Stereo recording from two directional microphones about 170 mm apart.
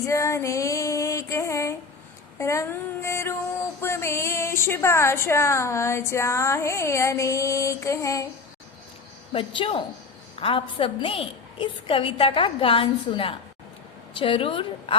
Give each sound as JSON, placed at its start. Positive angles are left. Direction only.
{"t": 0.0, "sound": "female singing", "side_deg": 15}
{"t": 2.4, "sound": "a woman's voice", "side_deg": 15}
{"t": 9.3, "sound": "a woman's voice", "side_deg": 30}